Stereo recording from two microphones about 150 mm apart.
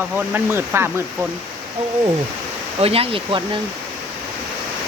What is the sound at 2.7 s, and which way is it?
Speech, 40° right (ahead or behind).